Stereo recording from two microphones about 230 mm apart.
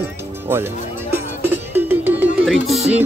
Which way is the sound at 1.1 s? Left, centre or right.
Centre.